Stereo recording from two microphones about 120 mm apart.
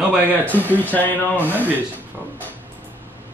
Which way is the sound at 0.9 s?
15° left (ahead or behind).